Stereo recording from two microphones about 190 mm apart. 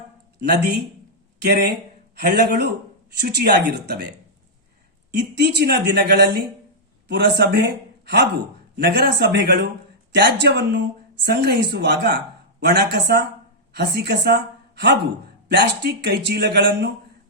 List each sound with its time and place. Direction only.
0.3 s a man's voice: 60° right (ahead or behind)
5.1 s a man's voice: 65° right (ahead or behind)